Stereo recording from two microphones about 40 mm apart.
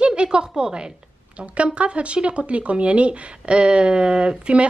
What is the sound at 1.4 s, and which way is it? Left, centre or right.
Speech, right.